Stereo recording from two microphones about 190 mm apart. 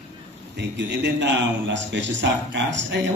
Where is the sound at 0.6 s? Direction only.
65° right (ahead or behind).